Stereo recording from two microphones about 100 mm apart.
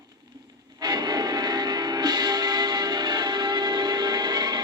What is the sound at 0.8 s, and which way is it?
Music, 40° right (ahead or behind).